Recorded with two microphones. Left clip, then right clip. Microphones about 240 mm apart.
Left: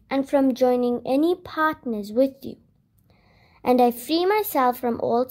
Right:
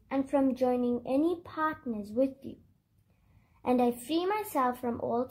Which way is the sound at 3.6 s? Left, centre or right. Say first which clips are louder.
Left 9 dB; left.